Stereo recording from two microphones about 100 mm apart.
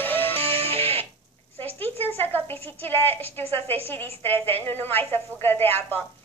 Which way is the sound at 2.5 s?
80° right.